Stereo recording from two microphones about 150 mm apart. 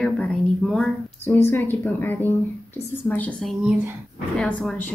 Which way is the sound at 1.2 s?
15° left (ahead or behind).